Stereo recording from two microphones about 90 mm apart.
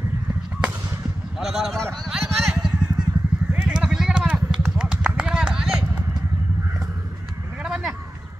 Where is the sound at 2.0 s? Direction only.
5° right (ahead or behind).